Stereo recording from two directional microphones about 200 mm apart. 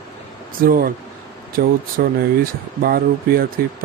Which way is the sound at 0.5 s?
45° right (ahead or behind).